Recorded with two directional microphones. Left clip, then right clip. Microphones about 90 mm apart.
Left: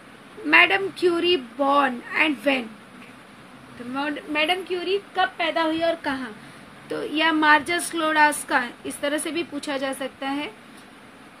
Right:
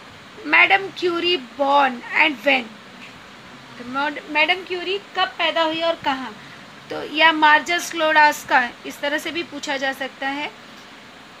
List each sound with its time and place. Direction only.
0.5 s speech: 25° left (ahead or behind)
3.9 s a woman's voice: 25° left (ahead or behind); by 6.3 s 10° left (ahead or behind)
6.9 s a woman's voice: 20° left (ahead or behind)